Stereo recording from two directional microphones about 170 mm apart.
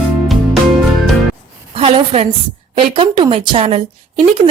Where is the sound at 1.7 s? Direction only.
35° right (ahead or behind).